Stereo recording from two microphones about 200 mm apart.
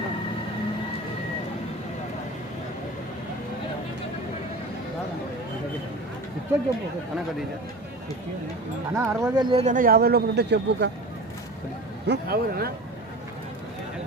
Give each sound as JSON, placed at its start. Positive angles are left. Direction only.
{"t": 9.0, "sound": "a man's voice", "side_deg": -15}
{"t": 12.0, "sound": "a man's voice", "side_deg": -55}